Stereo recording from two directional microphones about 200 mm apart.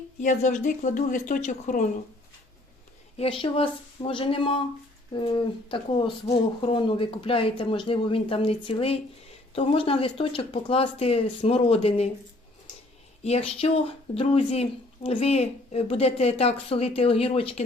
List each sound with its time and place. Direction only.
0.2 s speech: 40° left (ahead or behind)
3.2 s speech: 25° left (ahead or behind)
13.2 s speech: 30° left (ahead or behind)